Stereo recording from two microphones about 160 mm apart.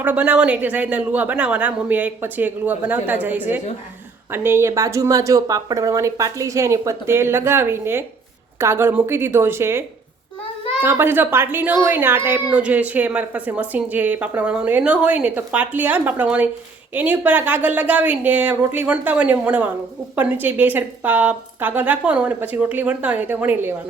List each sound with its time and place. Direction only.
0.0 s a woman's voice: 10° right (ahead or behind)
10.8 s speech: 15° right (ahead or behind)